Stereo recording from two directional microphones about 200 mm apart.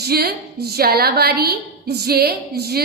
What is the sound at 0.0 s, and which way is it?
A woman's voice, 50° right (ahead or behind).